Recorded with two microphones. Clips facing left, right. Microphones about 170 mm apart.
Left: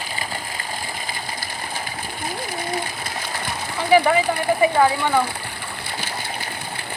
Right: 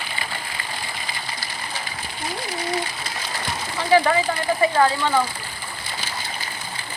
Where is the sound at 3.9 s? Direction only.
15° left (ahead or behind).